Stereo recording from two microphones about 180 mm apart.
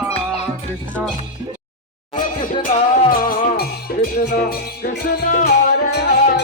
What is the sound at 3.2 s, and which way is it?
Music, 50° left (ahead or behind).